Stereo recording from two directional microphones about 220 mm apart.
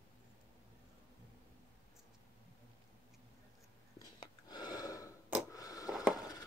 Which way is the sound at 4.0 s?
20° left (ahead or behind).